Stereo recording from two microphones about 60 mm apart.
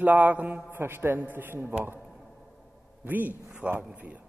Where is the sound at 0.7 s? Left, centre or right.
Right.